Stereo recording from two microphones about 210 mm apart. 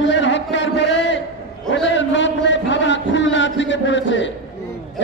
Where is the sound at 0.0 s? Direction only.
60° left (ahead or behind).